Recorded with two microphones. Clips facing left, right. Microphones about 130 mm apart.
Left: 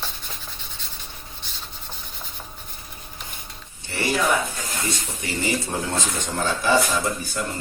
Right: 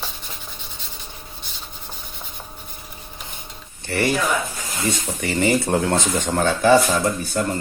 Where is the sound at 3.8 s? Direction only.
60° right (ahead or behind).